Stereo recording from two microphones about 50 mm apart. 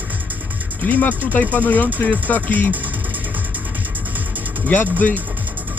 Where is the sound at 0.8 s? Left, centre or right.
Left.